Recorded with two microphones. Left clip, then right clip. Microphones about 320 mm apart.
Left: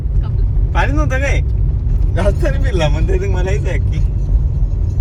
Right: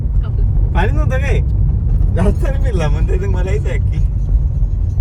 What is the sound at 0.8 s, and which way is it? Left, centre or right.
Vehicle, left.